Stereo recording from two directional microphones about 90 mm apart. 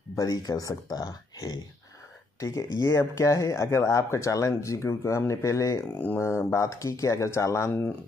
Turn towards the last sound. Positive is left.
turn(degrees=30)  # may be behind; listen again after turning